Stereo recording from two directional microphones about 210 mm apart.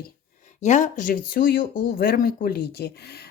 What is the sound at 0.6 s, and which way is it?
Speech, 35° left (ahead or behind).